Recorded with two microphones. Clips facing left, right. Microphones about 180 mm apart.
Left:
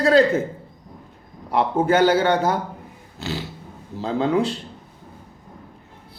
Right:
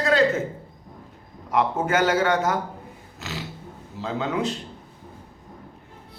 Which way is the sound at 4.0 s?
35° left (ahead or behind).